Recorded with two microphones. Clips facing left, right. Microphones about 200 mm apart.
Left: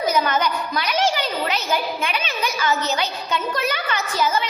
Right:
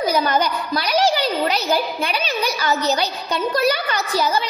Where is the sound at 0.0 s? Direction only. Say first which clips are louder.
Right 2 dB; 35° right (ahead or behind).